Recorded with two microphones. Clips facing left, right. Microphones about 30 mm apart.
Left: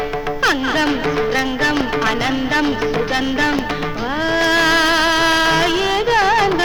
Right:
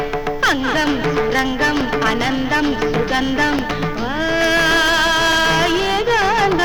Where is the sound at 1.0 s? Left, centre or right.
Centre.